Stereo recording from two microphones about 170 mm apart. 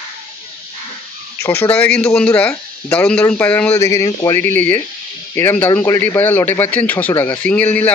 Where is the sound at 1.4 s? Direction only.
15° left (ahead or behind).